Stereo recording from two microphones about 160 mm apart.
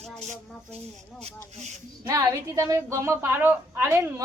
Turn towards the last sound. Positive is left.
turn(degrees=-15)  # may be behind; listen again after turning